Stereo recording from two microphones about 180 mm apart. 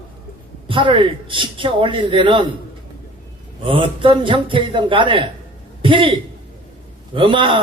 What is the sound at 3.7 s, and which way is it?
A man's voice, 30° right (ahead or behind).